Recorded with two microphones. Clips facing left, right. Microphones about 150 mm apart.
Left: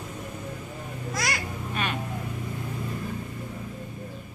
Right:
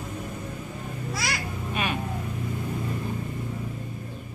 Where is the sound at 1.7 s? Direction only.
15° right (ahead or behind).